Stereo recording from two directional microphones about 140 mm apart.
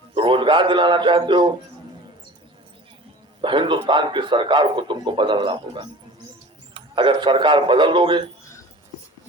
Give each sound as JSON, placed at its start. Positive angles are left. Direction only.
{"t": 0.2, "sound": "speech", "side_deg": -35}
{"t": 3.4, "sound": "a man's voice", "side_deg": -35}